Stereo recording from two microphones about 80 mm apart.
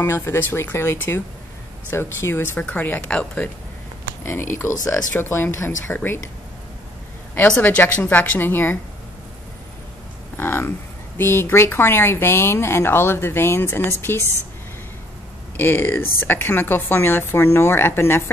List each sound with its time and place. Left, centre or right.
0.0 s a woman's voice: left; by 3.4 s centre
4.2 s a woman's voice: left
7.6 s a woman's voice: left
10.3 s a sound: left
11.1 s speech: left
15.5 s a woman's voice: left